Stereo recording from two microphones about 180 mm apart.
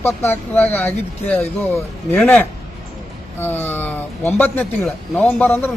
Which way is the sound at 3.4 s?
10° left (ahead or behind).